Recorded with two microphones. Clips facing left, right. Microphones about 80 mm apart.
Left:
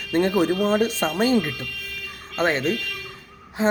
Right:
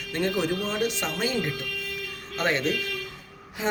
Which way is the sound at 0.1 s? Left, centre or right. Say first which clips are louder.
Left 6 dB; left.